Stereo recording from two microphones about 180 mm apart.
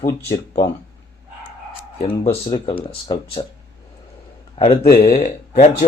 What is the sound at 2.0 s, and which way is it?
Speech, 25° left (ahead or behind).